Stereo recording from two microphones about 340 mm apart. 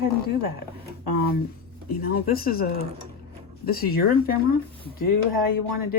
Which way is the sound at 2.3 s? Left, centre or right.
Left.